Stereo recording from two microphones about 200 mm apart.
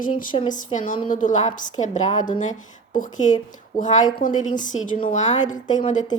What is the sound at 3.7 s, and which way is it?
A woman's voice, 40° left (ahead or behind).